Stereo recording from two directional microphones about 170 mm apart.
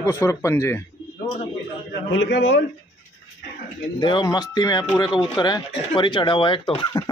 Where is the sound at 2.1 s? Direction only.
90° left.